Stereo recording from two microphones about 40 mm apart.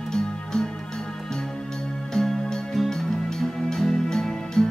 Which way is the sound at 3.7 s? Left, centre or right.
Centre.